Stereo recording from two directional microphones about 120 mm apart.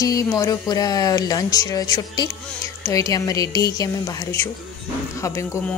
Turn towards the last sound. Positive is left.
turn(degrees=25)  # may be behind; listen again after turning